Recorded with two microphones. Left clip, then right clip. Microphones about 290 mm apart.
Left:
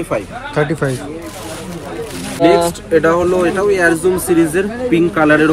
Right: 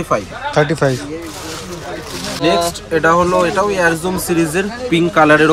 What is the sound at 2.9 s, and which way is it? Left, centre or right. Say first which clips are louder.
Speech: even; centre.